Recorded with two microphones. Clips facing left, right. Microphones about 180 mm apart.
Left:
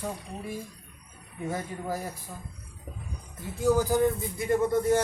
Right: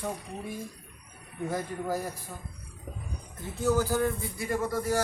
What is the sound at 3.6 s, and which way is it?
Speech, 15° left (ahead or behind).